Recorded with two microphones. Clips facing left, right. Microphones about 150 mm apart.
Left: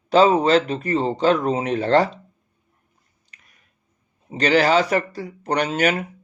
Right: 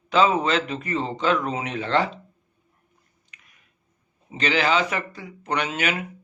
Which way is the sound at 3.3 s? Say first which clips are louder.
Left 1 dB; 35° left (ahead or behind).